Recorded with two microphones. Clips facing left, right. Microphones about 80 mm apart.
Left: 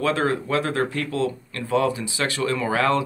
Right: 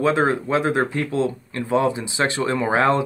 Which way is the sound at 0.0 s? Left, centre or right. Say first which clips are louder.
Right 3 dB; right.